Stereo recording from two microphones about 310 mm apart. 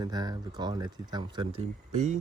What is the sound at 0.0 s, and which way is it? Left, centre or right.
Speech, centre.